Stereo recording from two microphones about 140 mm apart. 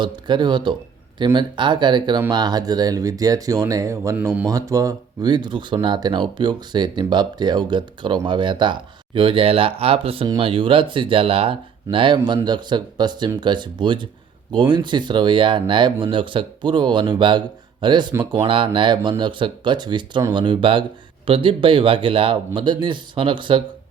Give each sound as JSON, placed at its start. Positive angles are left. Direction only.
{"t": 0.0, "sound": "speech", "side_deg": -35}